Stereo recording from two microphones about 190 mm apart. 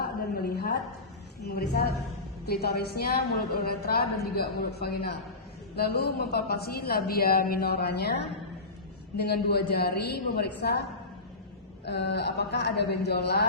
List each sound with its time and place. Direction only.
0.0 s a sound: 55° left (ahead or behind)
1.5 s a woman's voice: 55° left (ahead or behind)
9.1 s a woman's voice: 60° left (ahead or behind)
11.9 s a woman's voice: 60° left (ahead or behind)